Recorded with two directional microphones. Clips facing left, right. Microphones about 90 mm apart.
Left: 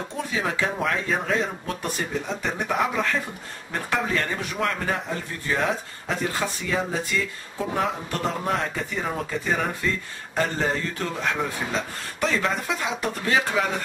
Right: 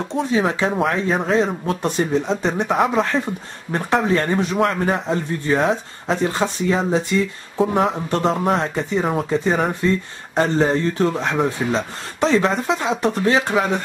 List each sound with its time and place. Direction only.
0.1 s speech: 25° right (ahead or behind)